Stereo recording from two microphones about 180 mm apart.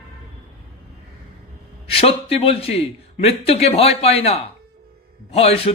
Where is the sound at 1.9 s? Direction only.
30° left (ahead or behind).